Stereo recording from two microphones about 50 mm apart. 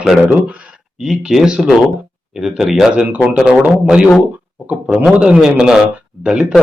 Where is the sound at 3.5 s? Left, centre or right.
Centre.